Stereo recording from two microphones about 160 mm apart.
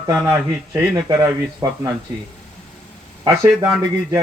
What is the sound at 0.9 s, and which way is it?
Speech, 20° right (ahead or behind).